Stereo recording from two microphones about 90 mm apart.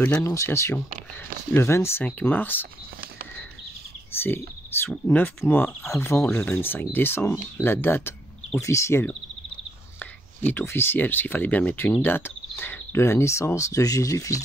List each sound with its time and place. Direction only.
0.2 s speech: 30° left (ahead or behind)
2.0 s speech: 20° left (ahead or behind)
4.2 s speech: 25° left (ahead or behind)
9.9 s speech: 20° left (ahead or behind); by 14.4 s 35° left (ahead or behind)